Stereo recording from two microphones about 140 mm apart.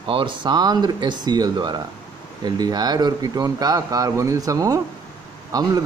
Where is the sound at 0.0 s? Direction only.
35° right (ahead or behind).